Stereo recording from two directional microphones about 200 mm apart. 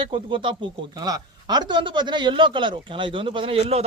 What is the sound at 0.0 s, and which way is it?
Speech, 25° right (ahead or behind).